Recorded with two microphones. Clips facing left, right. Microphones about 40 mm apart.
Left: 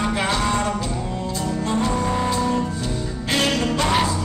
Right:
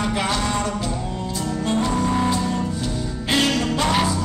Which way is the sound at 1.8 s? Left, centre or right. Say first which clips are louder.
Right 2 dB; centre.